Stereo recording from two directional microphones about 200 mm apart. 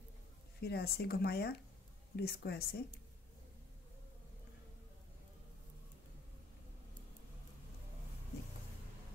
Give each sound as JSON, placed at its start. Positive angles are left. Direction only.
{"t": 0.6, "sound": "speech", "side_deg": 55}